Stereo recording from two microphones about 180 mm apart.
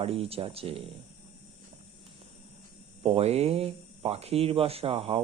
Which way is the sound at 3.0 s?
35° right (ahead or behind).